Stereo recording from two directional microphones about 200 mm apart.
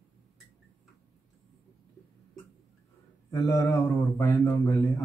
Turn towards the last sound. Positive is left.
turn(degrees=15)  # may be behind; listen again after turning